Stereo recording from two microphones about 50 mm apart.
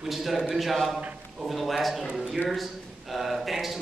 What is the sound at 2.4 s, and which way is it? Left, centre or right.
Speech, centre.